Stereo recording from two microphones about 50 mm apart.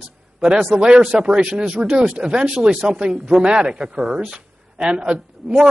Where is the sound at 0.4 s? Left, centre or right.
Centre.